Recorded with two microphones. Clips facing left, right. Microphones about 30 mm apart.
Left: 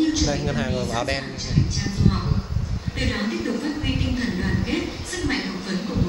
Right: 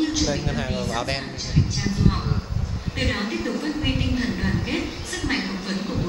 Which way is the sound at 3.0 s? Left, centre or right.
Centre.